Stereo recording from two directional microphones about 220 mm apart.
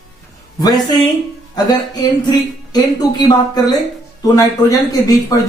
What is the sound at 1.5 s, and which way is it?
Speech, 20° left (ahead or behind).